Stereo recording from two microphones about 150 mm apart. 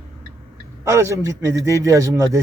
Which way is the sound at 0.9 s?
20° right (ahead or behind).